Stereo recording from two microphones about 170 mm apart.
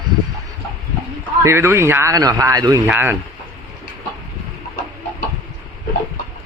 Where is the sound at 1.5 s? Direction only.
15° right (ahead or behind).